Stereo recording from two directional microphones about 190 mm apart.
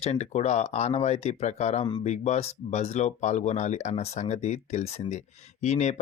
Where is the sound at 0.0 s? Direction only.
35° left (ahead or behind).